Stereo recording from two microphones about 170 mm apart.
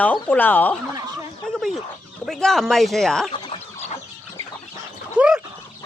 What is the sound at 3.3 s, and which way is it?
Chicken, 30° left (ahead or behind).